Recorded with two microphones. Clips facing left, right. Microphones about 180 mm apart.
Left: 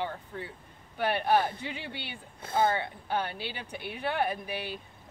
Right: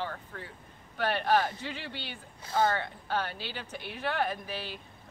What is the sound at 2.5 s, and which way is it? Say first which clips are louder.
Speech: left 1 dB; 15° left (ahead or behind).